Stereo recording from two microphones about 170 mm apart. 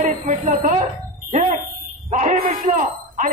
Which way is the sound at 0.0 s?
45° right (ahead or behind).